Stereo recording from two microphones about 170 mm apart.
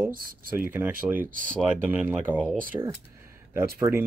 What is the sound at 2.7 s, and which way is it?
Speech, 20° right (ahead or behind).